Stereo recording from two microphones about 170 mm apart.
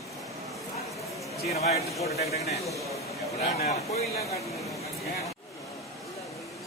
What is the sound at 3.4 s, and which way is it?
Speech, 40° left (ahead or behind).